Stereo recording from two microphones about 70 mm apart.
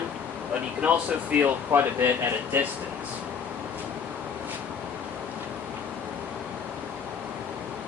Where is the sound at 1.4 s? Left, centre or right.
Right.